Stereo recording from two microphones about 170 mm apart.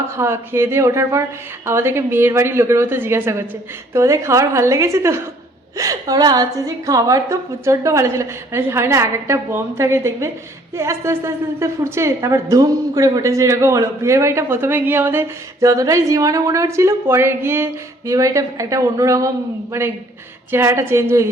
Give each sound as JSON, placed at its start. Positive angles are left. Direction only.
{"t": 0.2, "sound": "a woman's voice", "side_deg": -15}